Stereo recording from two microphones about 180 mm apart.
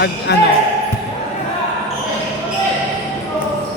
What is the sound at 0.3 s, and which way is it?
Speech, 65° left (ahead or behind).